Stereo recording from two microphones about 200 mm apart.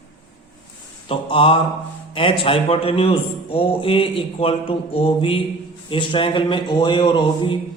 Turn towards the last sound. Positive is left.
turn(degrees=25)  # may be behind; listen again after turning